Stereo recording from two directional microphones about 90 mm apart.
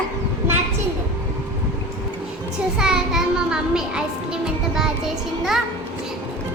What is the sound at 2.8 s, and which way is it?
A child's voice, 5° right (ahead or behind).